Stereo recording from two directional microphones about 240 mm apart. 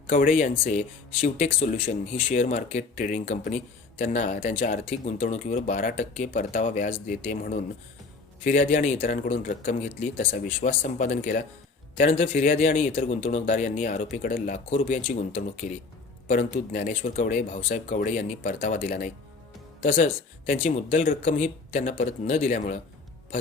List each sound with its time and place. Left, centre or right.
0.1 s speech: left